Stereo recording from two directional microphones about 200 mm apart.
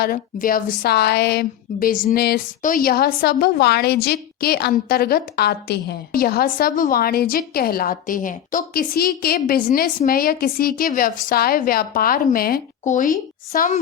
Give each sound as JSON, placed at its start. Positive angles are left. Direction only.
{"t": 0.0, "sound": "a woman's voice", "side_deg": 45}